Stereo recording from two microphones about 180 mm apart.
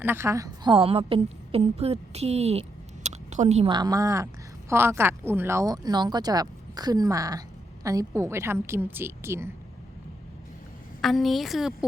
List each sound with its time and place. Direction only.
0.0 s a woman's voice: 15° right (ahead or behind); by 3.7 s 40° right (ahead or behind)
3.7 s a woman's voice: 20° right (ahead or behind)
11.0 s a woman's voice: centre (ahead or behind)